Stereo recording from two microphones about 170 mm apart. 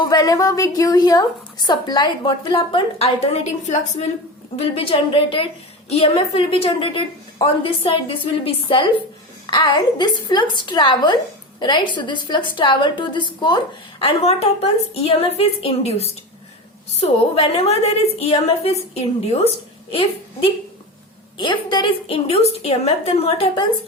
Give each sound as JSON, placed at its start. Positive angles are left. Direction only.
{"t": 0.0, "sound": "a woman's voice", "side_deg": 25}